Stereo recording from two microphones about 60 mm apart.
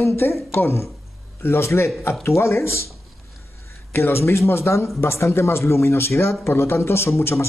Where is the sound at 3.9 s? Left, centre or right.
Left.